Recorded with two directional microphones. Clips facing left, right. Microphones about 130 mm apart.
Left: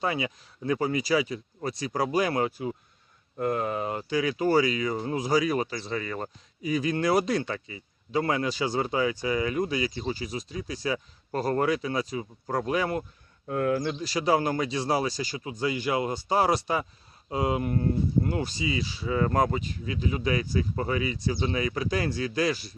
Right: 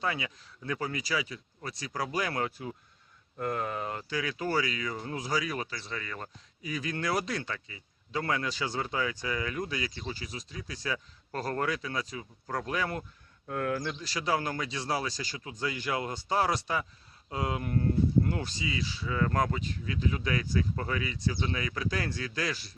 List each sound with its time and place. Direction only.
0.0 s speech: 20° left (ahead or behind)